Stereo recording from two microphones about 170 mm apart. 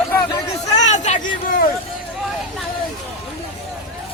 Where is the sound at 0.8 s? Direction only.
45° left (ahead or behind).